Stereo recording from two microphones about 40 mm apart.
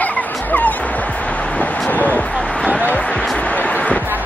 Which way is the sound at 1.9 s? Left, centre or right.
Left.